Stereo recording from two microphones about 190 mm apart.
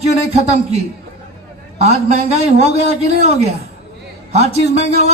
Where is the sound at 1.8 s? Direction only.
35° right (ahead or behind).